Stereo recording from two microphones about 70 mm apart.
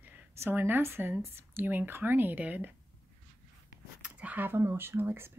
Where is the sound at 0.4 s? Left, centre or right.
Right.